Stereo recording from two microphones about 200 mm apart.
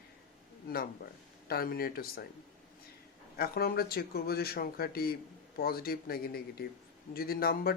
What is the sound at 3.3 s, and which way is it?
Speech, 50° left (ahead or behind).